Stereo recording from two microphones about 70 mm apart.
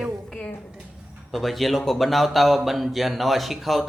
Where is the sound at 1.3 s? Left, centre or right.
Centre.